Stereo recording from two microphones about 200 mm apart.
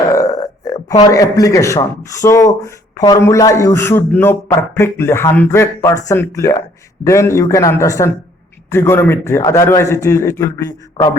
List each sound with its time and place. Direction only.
0.1 s burping: 15° left (ahead or behind)
0.7 s a man's voice: 20° left (ahead or behind)